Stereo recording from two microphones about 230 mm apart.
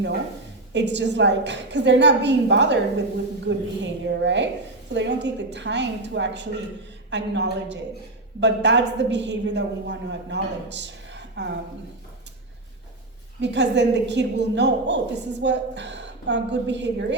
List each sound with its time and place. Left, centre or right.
0.7 s a woman's voice: right
13.4 s a woman's voice: right